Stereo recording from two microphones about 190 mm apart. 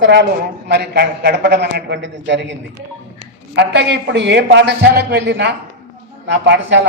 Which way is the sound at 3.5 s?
65° right (ahead or behind).